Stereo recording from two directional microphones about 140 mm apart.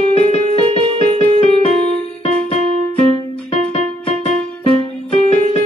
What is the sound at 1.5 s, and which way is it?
Music, 45° left (ahead or behind).